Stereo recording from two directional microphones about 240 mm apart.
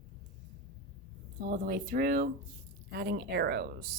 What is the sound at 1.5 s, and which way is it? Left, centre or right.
Speech, right.